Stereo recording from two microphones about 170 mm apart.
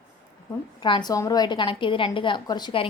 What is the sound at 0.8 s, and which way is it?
A woman's voice, 25° left (ahead or behind).